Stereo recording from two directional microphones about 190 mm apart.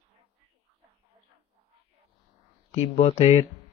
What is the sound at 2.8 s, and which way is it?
Speech, 35° left (ahead or behind).